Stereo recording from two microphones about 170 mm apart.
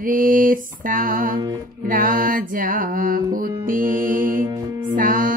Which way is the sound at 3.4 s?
55° right (ahead or behind).